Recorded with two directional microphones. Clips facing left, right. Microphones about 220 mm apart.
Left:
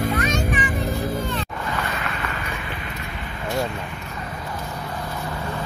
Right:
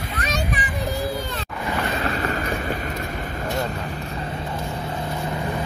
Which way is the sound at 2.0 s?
35° right (ahead or behind).